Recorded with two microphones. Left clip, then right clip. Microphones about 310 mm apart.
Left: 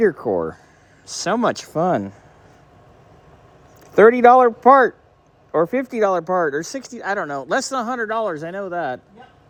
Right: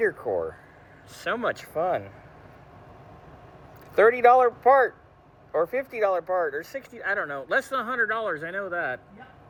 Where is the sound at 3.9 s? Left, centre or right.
Left.